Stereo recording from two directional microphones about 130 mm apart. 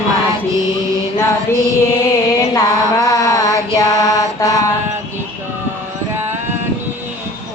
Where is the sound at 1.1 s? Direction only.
20° left (ahead or behind).